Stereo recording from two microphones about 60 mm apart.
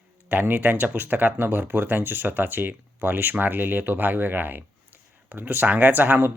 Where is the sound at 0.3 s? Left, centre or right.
Right.